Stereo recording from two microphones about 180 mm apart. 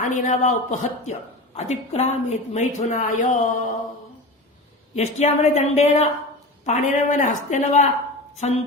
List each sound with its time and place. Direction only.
0.0 s a woman's voice: 45° left (ahead or behind)
4.9 s a woman's voice: 40° left (ahead or behind)